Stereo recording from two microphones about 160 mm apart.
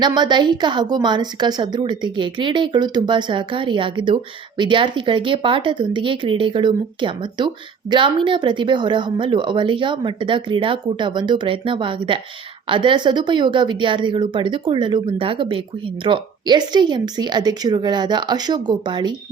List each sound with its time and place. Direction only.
0.0 s a woman's voice: 25° right (ahead or behind)